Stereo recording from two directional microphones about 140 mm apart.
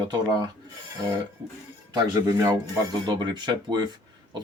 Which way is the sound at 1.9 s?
25° right (ahead or behind).